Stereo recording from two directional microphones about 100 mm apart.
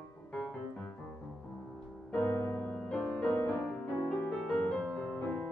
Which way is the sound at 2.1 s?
20° left (ahead or behind).